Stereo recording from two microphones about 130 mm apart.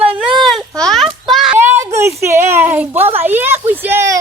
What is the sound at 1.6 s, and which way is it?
Speech, 20° right (ahead or behind).